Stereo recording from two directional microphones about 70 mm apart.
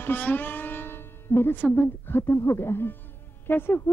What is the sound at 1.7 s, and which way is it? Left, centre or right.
A woman's voice, left.